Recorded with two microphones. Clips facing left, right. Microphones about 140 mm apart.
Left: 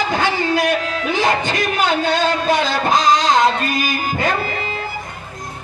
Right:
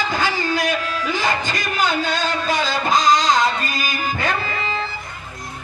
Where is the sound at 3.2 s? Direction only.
60° left (ahead or behind).